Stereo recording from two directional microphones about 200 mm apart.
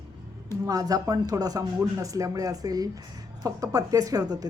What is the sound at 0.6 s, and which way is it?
A woman's voice, 20° right (ahead or behind).